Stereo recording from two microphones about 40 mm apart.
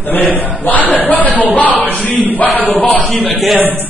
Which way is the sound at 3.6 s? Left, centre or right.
Right.